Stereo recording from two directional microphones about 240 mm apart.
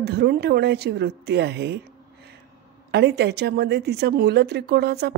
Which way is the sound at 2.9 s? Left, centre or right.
Right.